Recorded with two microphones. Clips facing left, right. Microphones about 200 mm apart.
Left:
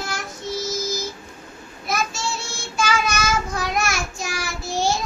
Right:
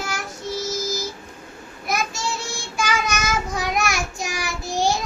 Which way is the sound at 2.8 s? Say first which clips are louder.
Left 2 dB; 15° right (ahead or behind).